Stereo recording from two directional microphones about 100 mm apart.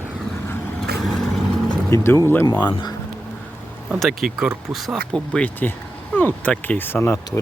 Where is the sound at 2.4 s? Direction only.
45° left (ahead or behind).